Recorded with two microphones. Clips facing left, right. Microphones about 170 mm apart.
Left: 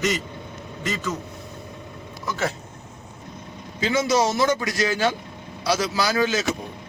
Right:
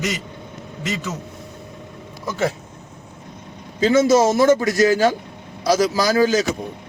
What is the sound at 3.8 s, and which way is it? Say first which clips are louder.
A man's voice: right 7 dB; 40° right (ahead or behind).